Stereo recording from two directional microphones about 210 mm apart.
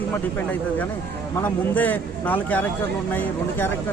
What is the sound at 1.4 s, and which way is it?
Speech, 10° left (ahead or behind).